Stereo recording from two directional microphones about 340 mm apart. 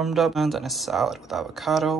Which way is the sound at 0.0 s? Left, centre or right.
Centre.